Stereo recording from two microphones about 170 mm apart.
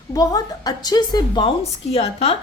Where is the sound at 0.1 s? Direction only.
20° left (ahead or behind).